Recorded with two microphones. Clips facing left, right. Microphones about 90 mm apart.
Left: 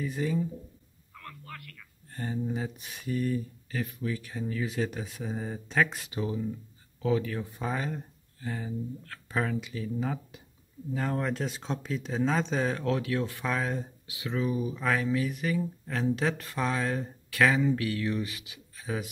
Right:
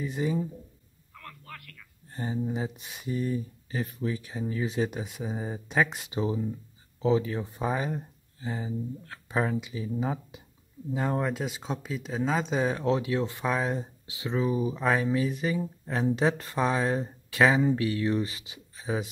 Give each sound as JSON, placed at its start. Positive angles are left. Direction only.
{"t": 0.0, "sound": "speech", "side_deg": -20}
{"t": 2.1, "sound": "speech", "side_deg": -15}
{"t": 3.8, "sound": "speech", "side_deg": -30}